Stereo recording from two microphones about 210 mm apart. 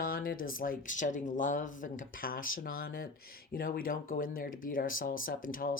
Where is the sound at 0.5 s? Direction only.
40° left (ahead or behind).